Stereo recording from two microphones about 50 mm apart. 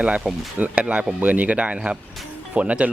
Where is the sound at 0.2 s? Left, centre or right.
Right.